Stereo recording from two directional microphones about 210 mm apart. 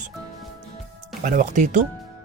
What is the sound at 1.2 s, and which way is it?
Speech, 35° right (ahead or behind).